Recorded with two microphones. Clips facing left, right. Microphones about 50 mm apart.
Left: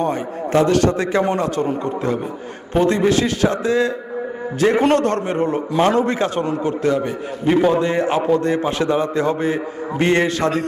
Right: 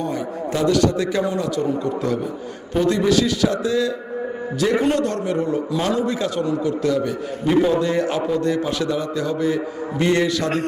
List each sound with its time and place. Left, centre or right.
0.0 s a man's voice: left